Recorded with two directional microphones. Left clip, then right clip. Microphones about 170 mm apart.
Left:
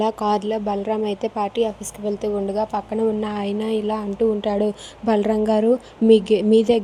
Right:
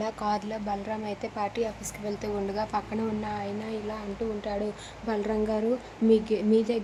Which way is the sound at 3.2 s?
40° left (ahead or behind).